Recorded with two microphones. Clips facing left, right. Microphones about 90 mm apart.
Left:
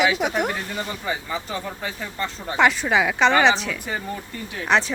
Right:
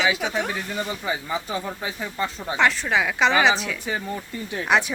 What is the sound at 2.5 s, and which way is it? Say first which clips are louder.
Speech: left 3 dB; 5° left (ahead or behind).